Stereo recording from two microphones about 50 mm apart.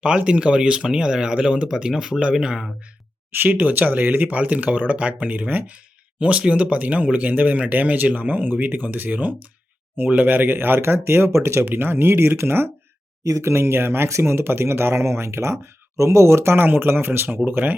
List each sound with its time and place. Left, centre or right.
0.3 s speech: right
3.3 s speech: right
5.7 s a sound: right
6.5 s speech: right
11.6 s speech: right
13.2 s speech: right
16.0 s speech: right